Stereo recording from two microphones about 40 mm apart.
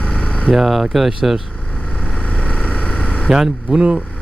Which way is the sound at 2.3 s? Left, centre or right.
Left.